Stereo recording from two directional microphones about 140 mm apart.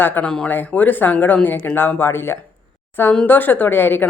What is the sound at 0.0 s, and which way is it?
Speech, 15° left (ahead or behind).